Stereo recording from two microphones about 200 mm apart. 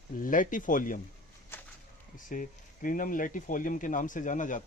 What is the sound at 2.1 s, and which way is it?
Speech, 45° left (ahead or behind).